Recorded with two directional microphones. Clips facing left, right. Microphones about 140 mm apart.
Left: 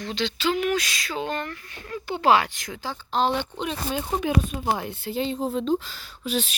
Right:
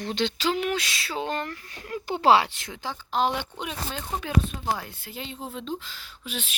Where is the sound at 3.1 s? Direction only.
10° right (ahead or behind).